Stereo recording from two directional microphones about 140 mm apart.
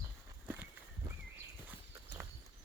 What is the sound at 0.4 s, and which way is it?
Walk, 15° right (ahead or behind).